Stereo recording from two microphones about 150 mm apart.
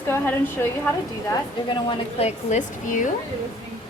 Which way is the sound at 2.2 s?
50° left (ahead or behind).